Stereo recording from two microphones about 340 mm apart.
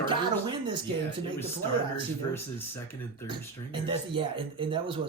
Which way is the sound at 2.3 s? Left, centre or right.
Centre.